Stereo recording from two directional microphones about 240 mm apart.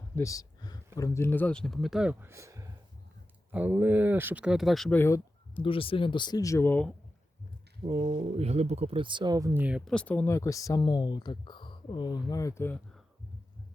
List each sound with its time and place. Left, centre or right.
0.2 s a sound: centre
0.9 s speech: centre
5.6 s speech: left; by 6.9 s centre
7.9 s speech: right; by 13.0 s centre